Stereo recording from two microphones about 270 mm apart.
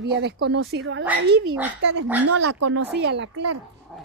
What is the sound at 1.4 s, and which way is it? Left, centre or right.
Speech, centre.